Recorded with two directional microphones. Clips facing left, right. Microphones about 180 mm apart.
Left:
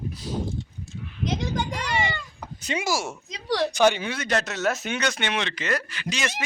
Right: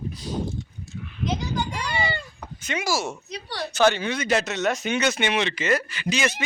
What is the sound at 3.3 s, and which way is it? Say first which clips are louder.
Speech: left 7 dB; 90° left.